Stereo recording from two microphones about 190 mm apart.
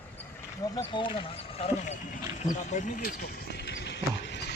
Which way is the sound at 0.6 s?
20° left (ahead or behind).